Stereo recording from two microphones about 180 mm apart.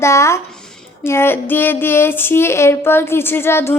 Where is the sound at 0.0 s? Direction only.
15° left (ahead or behind).